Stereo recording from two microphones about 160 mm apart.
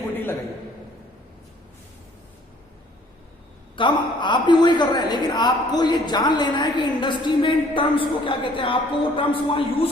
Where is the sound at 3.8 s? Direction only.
30° left (ahead or behind).